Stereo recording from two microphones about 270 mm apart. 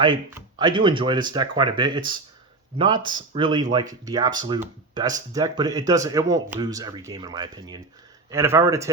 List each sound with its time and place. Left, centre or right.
0.0 s speech: centre